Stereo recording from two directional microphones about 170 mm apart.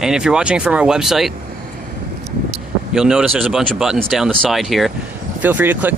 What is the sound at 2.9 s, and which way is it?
Speech, 5° right (ahead or behind).